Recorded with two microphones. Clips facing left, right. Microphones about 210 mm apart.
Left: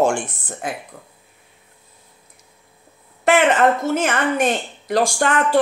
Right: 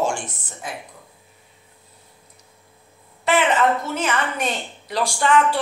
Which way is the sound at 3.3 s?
50° left (ahead or behind).